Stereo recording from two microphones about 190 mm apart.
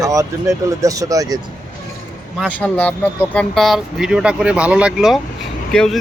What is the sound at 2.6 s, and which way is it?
Speech, 10° left (ahead or behind).